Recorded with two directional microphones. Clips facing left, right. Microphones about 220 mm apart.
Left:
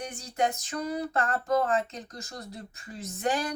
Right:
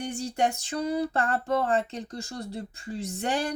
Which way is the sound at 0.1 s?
30° right (ahead or behind).